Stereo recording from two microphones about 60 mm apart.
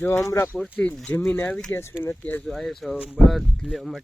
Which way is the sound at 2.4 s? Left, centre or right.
Centre.